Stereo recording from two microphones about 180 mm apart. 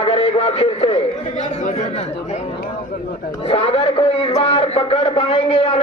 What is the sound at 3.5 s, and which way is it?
Speech, 35° left (ahead or behind).